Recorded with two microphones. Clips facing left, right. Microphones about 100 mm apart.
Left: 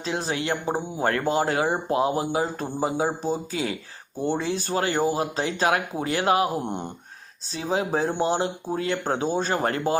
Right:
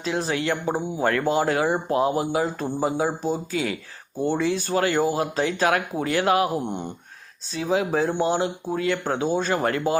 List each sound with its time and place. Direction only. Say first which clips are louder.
0.0 s speech: right 2 dB; 25° left (ahead or behind)
6.7 s speech: right 1 dB; 45° left (ahead or behind)
7.5 s speech: right 2 dB; 30° left (ahead or behind)